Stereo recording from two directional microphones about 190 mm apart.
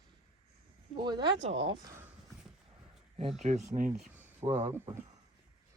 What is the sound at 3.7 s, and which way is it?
Speech, 40° right (ahead or behind).